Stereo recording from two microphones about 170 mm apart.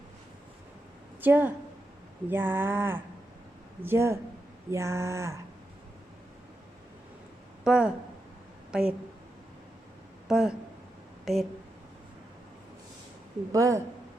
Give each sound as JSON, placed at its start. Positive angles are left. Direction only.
{"t": 1.2, "sound": "a sound", "side_deg": -10}
{"t": 7.6, "sound": "speech", "side_deg": -5}
{"t": 10.2, "sound": "speech", "side_deg": -5}
{"t": 13.5, "sound": "speech", "side_deg": -20}